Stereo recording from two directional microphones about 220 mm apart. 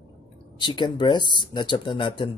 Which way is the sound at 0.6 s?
20° left (ahead or behind).